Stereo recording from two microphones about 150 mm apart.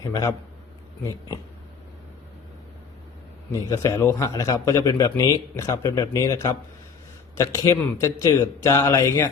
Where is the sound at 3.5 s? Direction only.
20° left (ahead or behind).